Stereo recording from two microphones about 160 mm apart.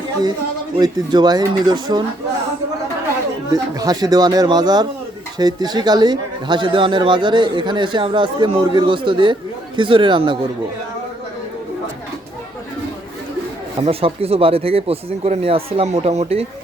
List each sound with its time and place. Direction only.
0.8 s speech: 25° right (ahead or behind)
3.5 s speech: 25° right (ahead or behind)
13.8 s speech: 40° right (ahead or behind)